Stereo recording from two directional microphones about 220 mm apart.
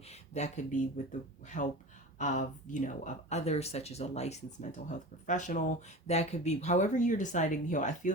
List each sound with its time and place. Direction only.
0.1 s speech: 30° left (ahead or behind)